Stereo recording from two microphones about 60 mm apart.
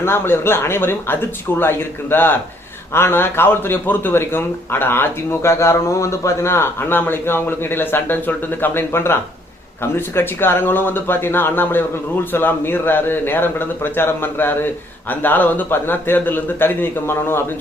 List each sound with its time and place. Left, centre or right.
0.0 s speech: left